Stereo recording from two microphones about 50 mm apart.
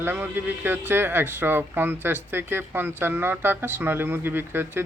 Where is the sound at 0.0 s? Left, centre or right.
Right.